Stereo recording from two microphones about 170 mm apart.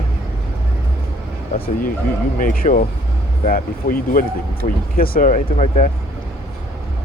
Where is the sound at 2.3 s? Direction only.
55° left (ahead or behind).